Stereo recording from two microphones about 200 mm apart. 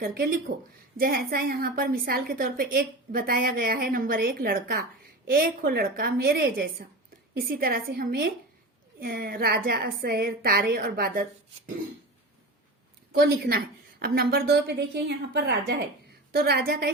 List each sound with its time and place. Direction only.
0.0 s a woman's voice: 50° right (ahead or behind)
0.5 s a woman's voice: 60° right (ahead or behind)
0.9 s a woman's voice: 45° right (ahead or behind)
13.1 s a woman's voice: 50° right (ahead or behind)